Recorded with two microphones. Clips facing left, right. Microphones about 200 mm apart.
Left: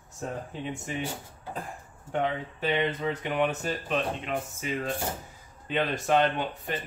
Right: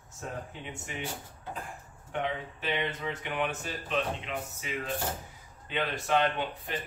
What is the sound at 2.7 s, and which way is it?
Speech, 40° left (ahead or behind).